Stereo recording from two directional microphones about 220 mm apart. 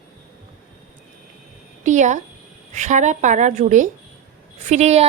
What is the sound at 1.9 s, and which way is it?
A woman's voice, 35° right (ahead or behind).